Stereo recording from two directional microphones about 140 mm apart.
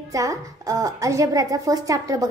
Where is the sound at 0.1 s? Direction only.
25° right (ahead or behind).